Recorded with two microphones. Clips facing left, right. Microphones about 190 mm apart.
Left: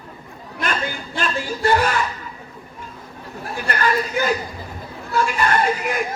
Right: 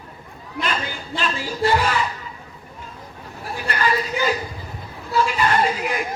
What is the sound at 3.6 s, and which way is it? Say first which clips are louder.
A man's voice: left 1 dB; 50° left (ahead or behind).